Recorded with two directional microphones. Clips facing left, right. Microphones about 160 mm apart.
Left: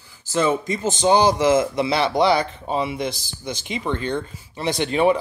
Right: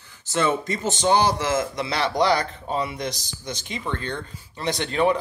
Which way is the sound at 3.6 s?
20° left (ahead or behind).